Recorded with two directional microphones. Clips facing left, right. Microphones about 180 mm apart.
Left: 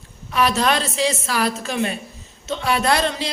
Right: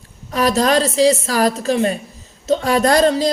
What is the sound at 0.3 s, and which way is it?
A woman's voice, 40° right (ahead or behind).